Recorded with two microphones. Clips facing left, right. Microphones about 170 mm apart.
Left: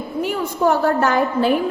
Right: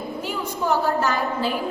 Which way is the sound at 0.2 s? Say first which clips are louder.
Left 9 dB; 60° left (ahead or behind).